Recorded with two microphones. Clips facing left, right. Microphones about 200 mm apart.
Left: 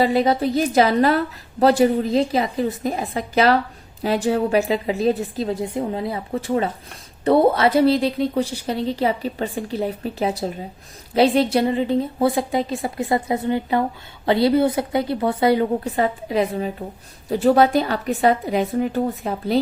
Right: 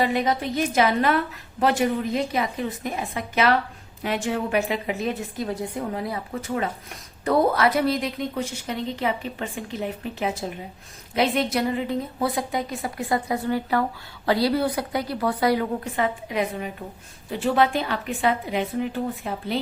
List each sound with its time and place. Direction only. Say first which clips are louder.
0.0 s a woman's voice: left 5 dB; 35° left (ahead or behind)